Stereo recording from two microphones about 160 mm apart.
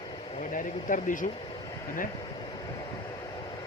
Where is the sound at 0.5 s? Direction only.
55° left (ahead or behind).